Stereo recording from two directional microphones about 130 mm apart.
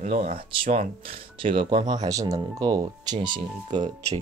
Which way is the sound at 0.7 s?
45° right (ahead or behind).